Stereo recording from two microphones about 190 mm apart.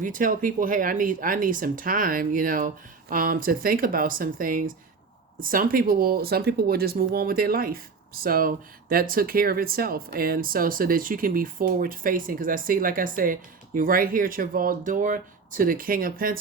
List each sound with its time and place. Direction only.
0.0 s speech: 45° right (ahead or behind)